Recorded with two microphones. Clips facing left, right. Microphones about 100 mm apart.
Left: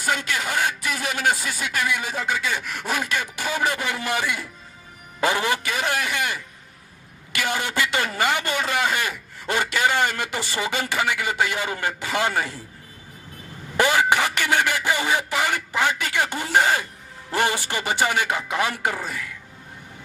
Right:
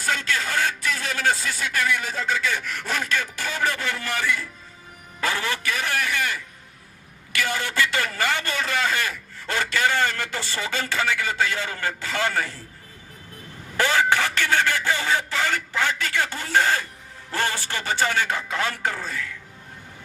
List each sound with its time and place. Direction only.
0.0 s a man's voice: 15° left (ahead or behind)
13.7 s a sound: 15° left (ahead or behind)
17.3 s a man's voice: 15° left (ahead or behind)